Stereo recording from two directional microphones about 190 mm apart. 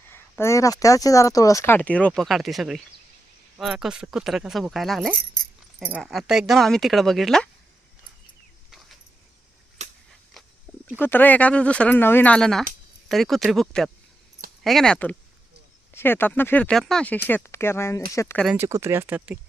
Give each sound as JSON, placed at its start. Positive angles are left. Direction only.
{"t": 0.1, "sound": "speech", "side_deg": 15}
{"t": 9.8, "sound": "a sound", "side_deg": -35}
{"t": 10.9, "sound": "speech", "side_deg": 10}
{"t": 18.4, "sound": "speech", "side_deg": -10}